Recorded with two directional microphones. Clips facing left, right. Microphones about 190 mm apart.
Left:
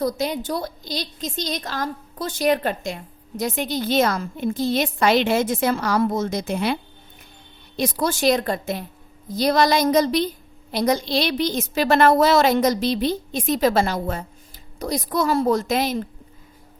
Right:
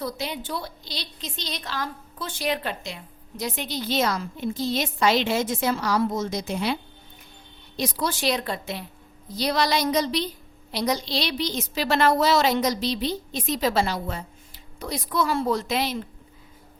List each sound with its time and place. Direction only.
0.0 s a woman's voice: 45° left (ahead or behind)
7.8 s a woman's voice: 45° left (ahead or behind)